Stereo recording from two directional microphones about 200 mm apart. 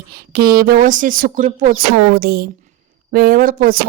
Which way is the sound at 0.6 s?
45° right (ahead or behind).